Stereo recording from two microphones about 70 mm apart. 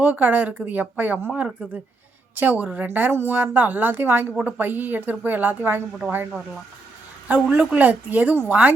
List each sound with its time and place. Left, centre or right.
0.0 s a woman's voice: right
7.3 s a woman's voice: right